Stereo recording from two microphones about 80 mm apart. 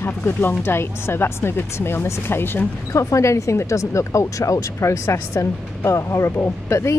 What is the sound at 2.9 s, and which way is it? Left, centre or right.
Speech, left.